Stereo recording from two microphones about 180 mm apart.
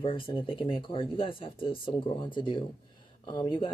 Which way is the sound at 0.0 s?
30° left (ahead or behind).